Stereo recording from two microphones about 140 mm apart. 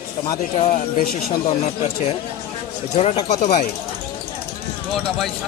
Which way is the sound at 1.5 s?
50° left (ahead or behind).